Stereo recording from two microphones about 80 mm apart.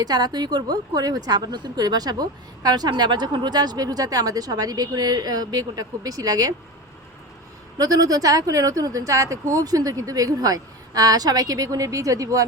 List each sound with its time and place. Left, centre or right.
0.0 s a woman's voice: right
7.8 s speech: right